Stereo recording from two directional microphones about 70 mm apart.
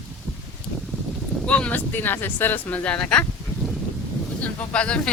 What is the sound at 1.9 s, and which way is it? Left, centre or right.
Speech, left.